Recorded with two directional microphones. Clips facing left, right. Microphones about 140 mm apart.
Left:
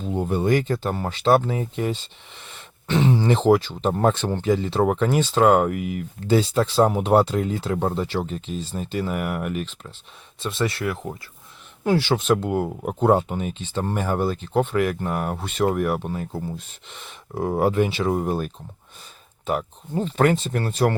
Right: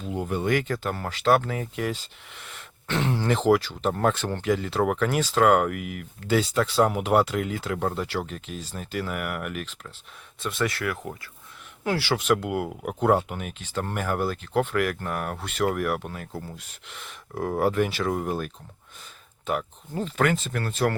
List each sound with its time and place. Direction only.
0.0 s speech: 30° left (ahead or behind)
2.5 s a sound: 15° left (ahead or behind)
3.2 s speech: 25° left (ahead or behind)
17.1 s speech: 25° left (ahead or behind)
19.9 s speech: 30° left (ahead or behind)